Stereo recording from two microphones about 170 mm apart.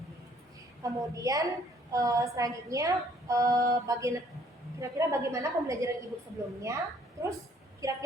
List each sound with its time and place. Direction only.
0.8 s a woman's voice: 20° right (ahead or behind)